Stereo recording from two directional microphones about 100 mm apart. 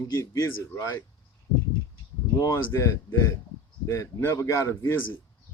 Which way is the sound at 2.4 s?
30° left (ahead or behind).